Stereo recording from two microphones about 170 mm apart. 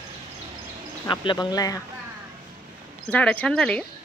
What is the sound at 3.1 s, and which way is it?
Speech, 10° left (ahead or behind).